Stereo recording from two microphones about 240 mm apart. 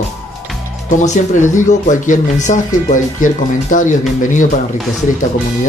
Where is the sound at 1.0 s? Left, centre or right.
Left.